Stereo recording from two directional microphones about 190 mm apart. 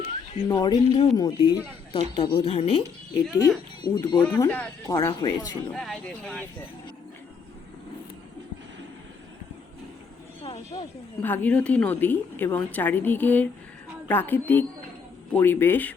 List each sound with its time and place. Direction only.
0.4 s speech: 20° left (ahead or behind)
4.4 s speech: 15° left (ahead or behind)
5.7 s speech: centre (ahead or behind)
10.4 s sheep: 30° left (ahead or behind)
11.2 s a woman's voice: 10° left (ahead or behind)